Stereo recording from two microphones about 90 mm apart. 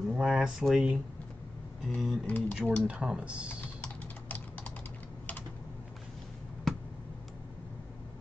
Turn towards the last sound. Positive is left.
turn(degrees=0)  # may be behind; listen again after turning